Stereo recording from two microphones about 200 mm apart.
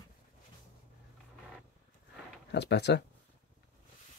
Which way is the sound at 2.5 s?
60° left (ahead or behind).